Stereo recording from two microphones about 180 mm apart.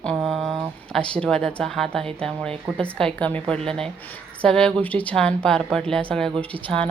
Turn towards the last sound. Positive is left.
turn(degrees=5)  # may be behind; listen again after turning